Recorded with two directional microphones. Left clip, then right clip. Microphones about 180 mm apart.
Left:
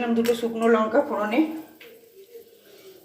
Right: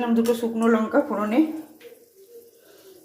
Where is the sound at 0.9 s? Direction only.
15° right (ahead or behind).